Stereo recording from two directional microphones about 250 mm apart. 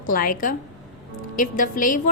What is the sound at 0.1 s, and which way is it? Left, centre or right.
A woman's voice, left.